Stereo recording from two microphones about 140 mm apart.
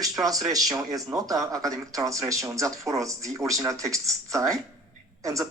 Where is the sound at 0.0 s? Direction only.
25° right (ahead or behind).